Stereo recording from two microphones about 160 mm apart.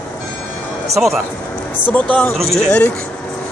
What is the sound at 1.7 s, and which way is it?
Speech, 10° left (ahead or behind).